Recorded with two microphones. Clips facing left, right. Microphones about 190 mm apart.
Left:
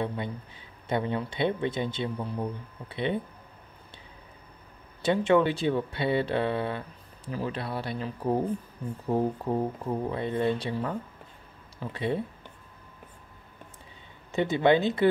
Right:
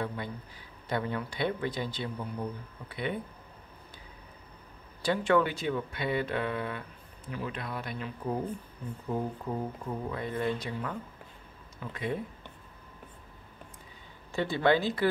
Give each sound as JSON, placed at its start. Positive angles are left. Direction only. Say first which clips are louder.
{"t": 0.0, "sound": "speech", "louder": "left 4 dB", "side_deg": 25}
{"t": 5.0, "sound": "speech", "louder": "left 4 dB", "side_deg": 20}
{"t": 14.3, "sound": "speech", "louder": "left 4 dB", "side_deg": 20}